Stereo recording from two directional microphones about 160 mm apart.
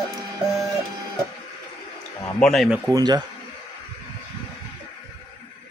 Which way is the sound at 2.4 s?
Centre (ahead or behind).